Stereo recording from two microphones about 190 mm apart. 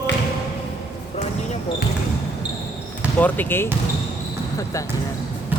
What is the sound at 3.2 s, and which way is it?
Speech, 10° left (ahead or behind).